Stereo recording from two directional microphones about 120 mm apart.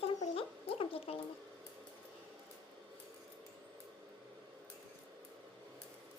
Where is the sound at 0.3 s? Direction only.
50° left (ahead or behind).